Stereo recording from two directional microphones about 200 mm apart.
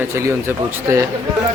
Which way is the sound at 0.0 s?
10° right (ahead or behind).